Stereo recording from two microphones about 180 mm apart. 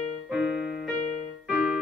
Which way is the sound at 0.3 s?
5° right (ahead or behind).